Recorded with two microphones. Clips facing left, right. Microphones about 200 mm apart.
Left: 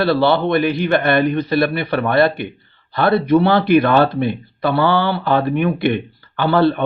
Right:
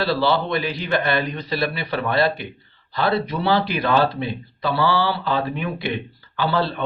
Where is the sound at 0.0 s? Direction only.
60° left (ahead or behind).